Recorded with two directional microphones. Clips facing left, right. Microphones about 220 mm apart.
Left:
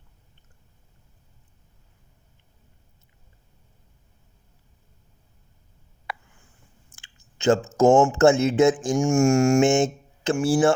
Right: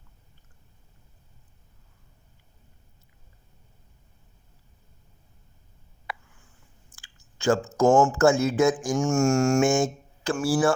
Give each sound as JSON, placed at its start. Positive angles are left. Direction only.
{"t": 6.9, "sound": "speech", "side_deg": 20}
{"t": 9.0, "sound": "a sound", "side_deg": 15}
{"t": 9.6, "sound": "speech", "side_deg": 25}